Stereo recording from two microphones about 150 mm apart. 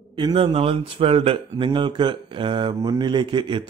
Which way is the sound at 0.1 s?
35° right (ahead or behind).